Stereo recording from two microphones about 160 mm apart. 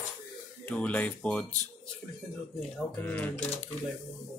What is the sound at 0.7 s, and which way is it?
Speech, 10° left (ahead or behind).